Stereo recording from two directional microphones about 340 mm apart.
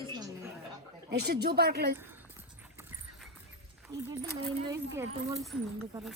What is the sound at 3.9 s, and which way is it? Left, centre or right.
A woman's voice, centre.